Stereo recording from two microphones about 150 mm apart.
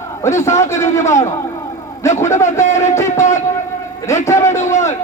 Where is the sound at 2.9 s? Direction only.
20° left (ahead or behind).